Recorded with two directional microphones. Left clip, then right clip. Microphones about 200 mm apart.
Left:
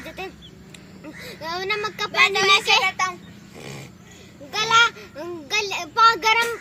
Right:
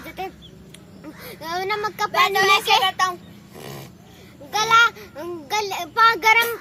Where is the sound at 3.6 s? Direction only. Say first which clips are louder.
Right 1 dB; 10° right (ahead or behind).